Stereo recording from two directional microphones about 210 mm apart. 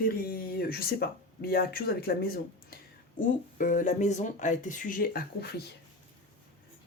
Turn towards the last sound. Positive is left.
turn(degrees=50)  # may be behind; listen again after turning